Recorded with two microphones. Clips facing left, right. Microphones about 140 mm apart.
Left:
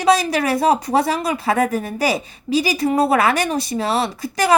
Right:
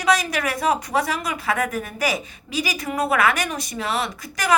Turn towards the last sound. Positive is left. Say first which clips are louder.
# left 6 dB
turn(degrees=30)  # may be behind; listen again after turning